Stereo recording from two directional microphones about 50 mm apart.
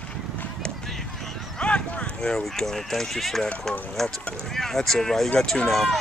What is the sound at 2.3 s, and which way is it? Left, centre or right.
Speech, centre.